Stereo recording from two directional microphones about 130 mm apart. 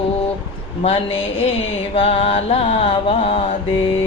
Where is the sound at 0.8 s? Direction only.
45° left (ahead or behind).